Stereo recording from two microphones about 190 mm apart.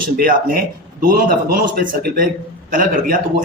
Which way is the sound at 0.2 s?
50° right (ahead or behind).